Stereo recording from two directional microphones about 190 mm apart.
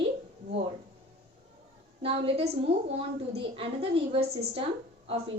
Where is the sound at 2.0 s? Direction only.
30° right (ahead or behind).